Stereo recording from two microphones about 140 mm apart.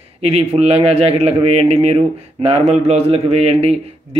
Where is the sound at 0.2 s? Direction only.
50° right (ahead or behind).